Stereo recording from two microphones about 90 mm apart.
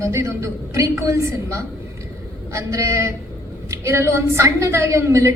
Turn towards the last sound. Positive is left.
turn(degrees=-35)  # may be behind; listen again after turning